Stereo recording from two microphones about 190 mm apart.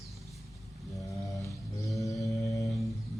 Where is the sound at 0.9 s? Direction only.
15° left (ahead or behind).